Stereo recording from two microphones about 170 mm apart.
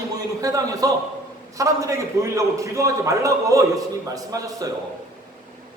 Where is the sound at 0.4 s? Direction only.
20° right (ahead or behind).